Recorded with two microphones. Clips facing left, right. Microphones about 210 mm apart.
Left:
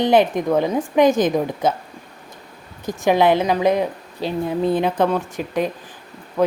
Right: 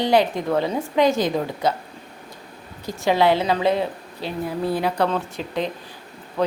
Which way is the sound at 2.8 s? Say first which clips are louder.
Left 3 dB; 15° left (ahead or behind).